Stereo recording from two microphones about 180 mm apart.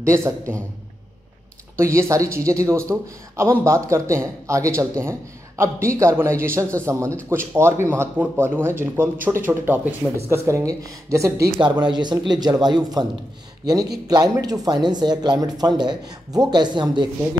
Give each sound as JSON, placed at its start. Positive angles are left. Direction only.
{"t": 1.8, "sound": "speech", "side_deg": -15}
{"t": 14.0, "sound": "speech", "side_deg": -20}